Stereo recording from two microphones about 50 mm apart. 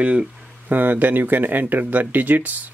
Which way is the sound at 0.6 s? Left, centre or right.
Right.